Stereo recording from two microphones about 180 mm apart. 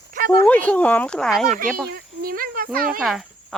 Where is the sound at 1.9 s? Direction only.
55° right (ahead or behind).